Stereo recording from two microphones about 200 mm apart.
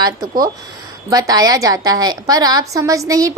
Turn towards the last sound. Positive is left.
turn(degrees=-15)  # may be behind; listen again after turning